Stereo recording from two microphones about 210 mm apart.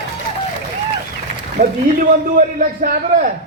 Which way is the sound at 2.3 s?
40° right (ahead or behind).